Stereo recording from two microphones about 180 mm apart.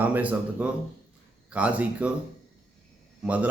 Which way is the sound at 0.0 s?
10° right (ahead or behind).